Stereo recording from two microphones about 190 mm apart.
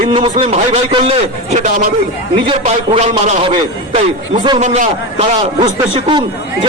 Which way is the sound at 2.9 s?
30° right (ahead or behind).